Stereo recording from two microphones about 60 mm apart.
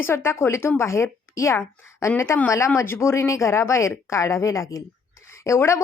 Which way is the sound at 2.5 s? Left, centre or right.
Left.